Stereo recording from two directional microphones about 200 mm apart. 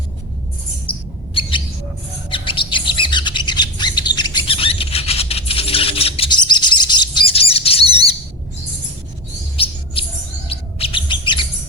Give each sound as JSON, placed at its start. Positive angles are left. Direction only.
{"t": 0.9, "sound": "chirp", "side_deg": 25}
{"t": 2.3, "sound": "bird", "side_deg": 25}
{"t": 9.6, "sound": "bird", "side_deg": 25}